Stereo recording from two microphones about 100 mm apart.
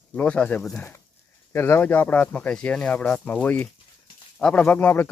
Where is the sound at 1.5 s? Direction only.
25° left (ahead or behind).